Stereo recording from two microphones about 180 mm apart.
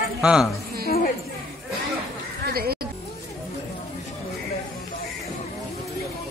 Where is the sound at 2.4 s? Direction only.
60° right (ahead or behind).